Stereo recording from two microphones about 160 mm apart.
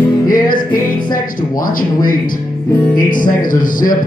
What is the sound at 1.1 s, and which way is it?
Speech, 60° left (ahead or behind).